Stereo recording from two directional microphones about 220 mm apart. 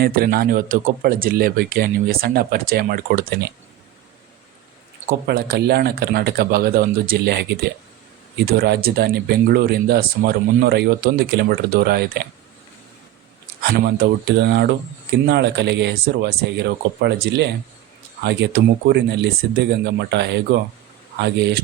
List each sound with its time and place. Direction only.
0.0 s speech: 45° right (ahead or behind)
5.0 s speech: 45° right (ahead or behind)
13.7 s speech: 45° right (ahead or behind)